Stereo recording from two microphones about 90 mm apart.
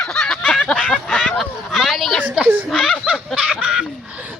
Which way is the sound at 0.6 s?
15° left (ahead or behind).